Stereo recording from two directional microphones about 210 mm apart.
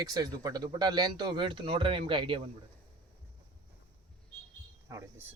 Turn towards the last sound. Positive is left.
turn(degrees=-15)  # may be behind; listen again after turning